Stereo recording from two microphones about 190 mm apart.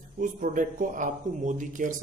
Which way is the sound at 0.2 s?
45° right (ahead or behind).